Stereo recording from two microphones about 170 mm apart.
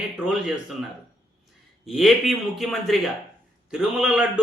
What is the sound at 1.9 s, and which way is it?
A man's voice, centre (ahead or behind).